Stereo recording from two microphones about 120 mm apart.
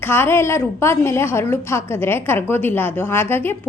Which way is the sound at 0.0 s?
15° left (ahead or behind).